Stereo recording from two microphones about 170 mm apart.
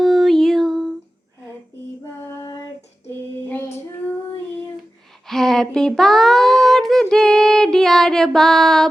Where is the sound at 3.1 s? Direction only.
10° left (ahead or behind).